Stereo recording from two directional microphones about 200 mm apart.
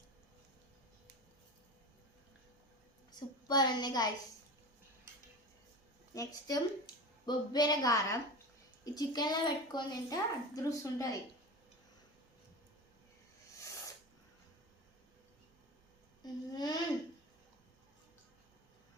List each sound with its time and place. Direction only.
3.1 s a woman's voice: 20° left (ahead or behind)
6.1 s a child's voice: 20° left (ahead or behind)
16.2 s a sound: 20° left (ahead or behind)